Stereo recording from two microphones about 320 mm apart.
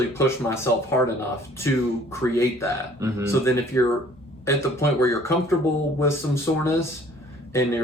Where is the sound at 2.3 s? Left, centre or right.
Centre.